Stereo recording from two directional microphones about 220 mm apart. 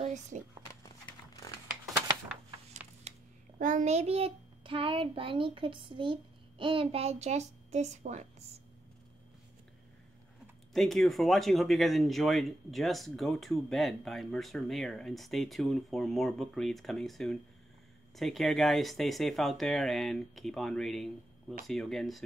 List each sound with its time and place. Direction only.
0.0 s a sound: 30° right (ahead or behind)
3.0 s a child's voice: 30° right (ahead or behind)
10.7 s speech: centre (ahead or behind)